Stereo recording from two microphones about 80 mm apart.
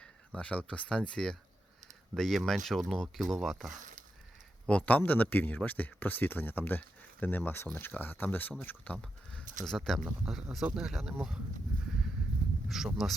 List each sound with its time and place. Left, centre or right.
0.3 s speech: centre
9.0 s speech: centre
12.6 s speech: centre